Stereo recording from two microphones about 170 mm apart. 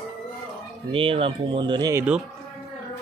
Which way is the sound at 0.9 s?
35° right (ahead or behind).